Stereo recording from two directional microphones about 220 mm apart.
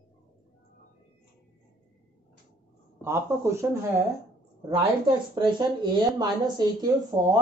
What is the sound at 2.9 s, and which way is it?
Speech, 10° right (ahead or behind).